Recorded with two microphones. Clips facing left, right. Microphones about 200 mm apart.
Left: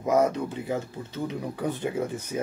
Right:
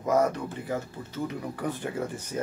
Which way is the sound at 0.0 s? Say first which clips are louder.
Left 2 dB; 20° left (ahead or behind).